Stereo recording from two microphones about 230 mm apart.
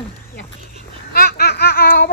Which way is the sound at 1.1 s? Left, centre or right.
Left.